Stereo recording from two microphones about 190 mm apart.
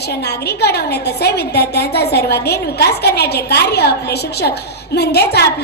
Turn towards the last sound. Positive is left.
turn(degrees=60)  # may be behind; listen again after turning